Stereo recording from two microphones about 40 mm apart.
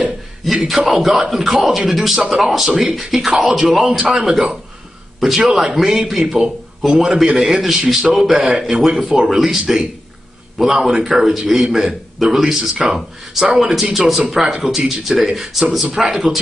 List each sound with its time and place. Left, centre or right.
0.5 s a man's voice: centre
3.0 s a man's voice: centre
8.4 s speech: right
8.6 s a man's voice: centre